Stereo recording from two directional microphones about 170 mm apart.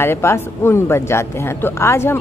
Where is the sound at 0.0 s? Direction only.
15° left (ahead or behind).